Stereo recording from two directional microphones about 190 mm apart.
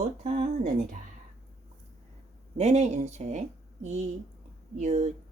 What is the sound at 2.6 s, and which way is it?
Speech, 35° right (ahead or behind).